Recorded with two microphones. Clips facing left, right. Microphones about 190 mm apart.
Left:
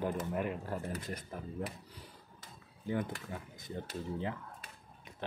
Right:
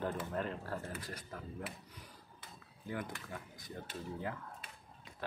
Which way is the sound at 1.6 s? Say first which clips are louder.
Left 3 dB; 40° left (ahead or behind).